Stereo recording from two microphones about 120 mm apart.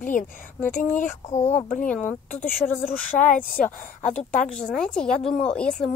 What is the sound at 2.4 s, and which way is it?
Speech, 15° left (ahead or behind).